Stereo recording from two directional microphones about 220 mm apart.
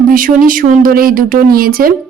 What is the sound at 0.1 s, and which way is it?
A woman's voice, 40° right (ahead or behind).